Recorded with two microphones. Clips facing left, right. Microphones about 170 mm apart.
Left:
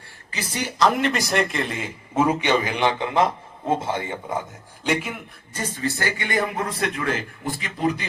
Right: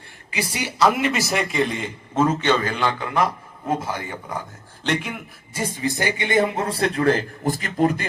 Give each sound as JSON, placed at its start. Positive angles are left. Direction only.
{"t": 0.3, "sound": "a man's voice", "side_deg": -10}
{"t": 4.8, "sound": "a man's voice", "side_deg": 5}
{"t": 5.5, "sound": "a man's voice", "side_deg": -10}